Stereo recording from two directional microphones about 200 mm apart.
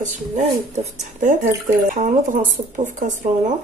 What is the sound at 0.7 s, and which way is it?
A woman's voice, 40° right (ahead or behind).